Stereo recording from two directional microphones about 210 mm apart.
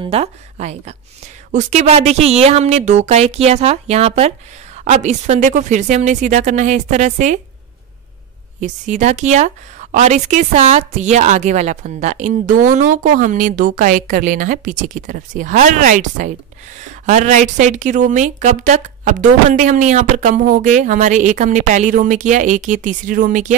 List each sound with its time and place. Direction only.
0.0 s a woman's voice: 30° right (ahead or behind)
8.5 s a woman's voice: 35° right (ahead or behind)